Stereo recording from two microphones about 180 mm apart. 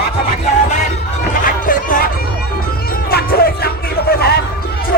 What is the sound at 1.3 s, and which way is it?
Run, 50° left (ahead or behind).